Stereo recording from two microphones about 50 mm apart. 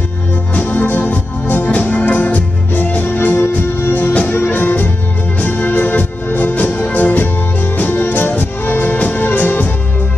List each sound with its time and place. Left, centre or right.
0.6 s music: left
3.9 s music: left